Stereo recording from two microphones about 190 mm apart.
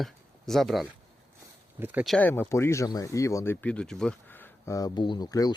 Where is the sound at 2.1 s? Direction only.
10° left (ahead or behind).